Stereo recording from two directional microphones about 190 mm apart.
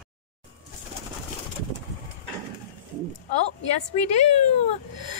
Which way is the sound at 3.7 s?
35° left (ahead or behind).